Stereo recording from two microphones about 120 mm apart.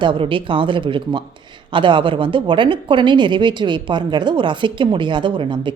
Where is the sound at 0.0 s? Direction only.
45° right (ahead or behind).